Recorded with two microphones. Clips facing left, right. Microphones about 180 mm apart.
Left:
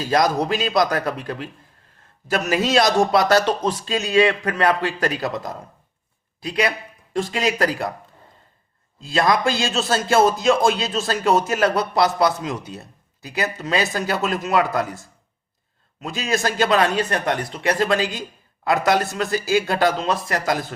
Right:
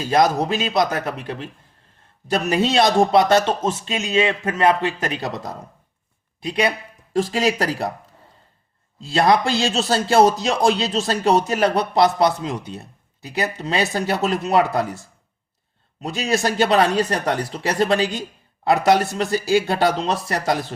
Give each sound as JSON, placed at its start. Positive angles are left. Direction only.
{"t": 0.0, "sound": "a man's voice", "side_deg": -25}
{"t": 9.0, "sound": "a man's voice", "side_deg": -30}
{"t": 16.0, "sound": "a man's voice", "side_deg": -35}